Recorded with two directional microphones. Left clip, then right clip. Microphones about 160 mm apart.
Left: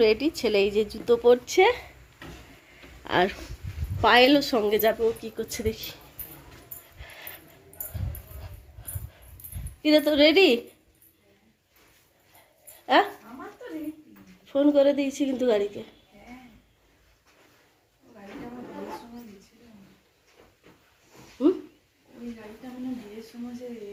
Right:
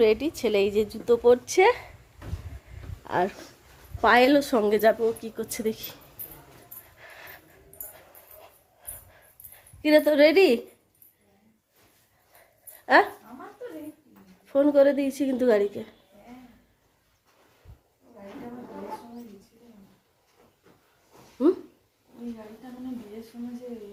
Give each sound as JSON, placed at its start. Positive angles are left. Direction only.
{"t": 0.0, "sound": "a woman's voice", "side_deg": 0}
{"t": 3.0, "sound": "speech", "side_deg": 5}
{"t": 4.0, "sound": "a woman's voice", "side_deg": -10}
{"t": 7.0, "sound": "a sound", "side_deg": -10}
{"t": 9.8, "sound": "a woman's voice", "side_deg": -20}
{"t": 12.8, "sound": "a sound", "side_deg": -20}
{"t": 14.4, "sound": "a woman's voice", "side_deg": -20}